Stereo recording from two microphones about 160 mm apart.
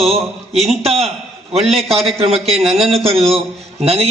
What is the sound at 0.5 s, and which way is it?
Speech, 40° right (ahead or behind).